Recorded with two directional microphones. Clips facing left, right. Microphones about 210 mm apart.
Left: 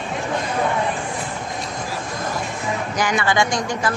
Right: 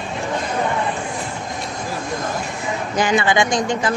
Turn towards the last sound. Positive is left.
turn(degrees=-20)  # may be behind; listen again after turning